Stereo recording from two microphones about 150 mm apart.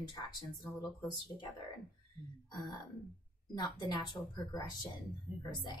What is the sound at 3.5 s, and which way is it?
A woman's voice, 30° left (ahead or behind).